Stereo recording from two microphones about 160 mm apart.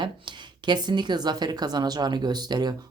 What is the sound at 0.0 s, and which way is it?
Speech, 30° right (ahead or behind).